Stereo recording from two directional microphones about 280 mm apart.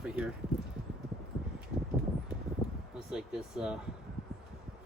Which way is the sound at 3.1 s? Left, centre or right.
Centre.